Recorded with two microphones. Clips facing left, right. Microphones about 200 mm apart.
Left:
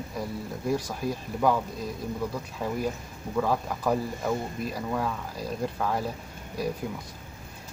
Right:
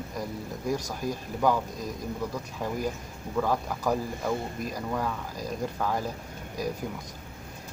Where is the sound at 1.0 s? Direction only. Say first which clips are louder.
Even; 45° right (ahead or behind).